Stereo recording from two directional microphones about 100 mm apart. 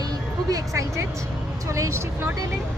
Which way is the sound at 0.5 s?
30° right (ahead or behind).